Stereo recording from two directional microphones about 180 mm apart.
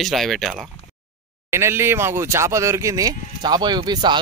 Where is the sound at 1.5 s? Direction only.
15° right (ahead or behind).